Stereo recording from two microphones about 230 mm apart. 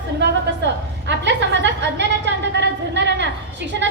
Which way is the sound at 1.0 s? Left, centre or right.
Right.